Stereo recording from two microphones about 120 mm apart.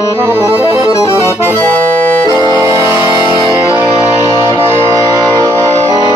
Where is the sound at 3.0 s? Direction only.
35° left (ahead or behind).